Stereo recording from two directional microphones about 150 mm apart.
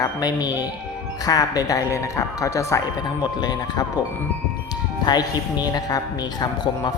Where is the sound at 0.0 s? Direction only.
25° left (ahead or behind).